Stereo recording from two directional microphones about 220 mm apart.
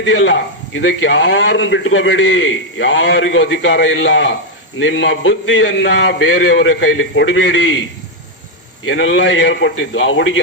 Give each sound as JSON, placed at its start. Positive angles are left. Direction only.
{"t": 0.0, "sound": "a man's voice", "side_deg": 55}
{"t": 8.8, "sound": "a man's voice", "side_deg": 60}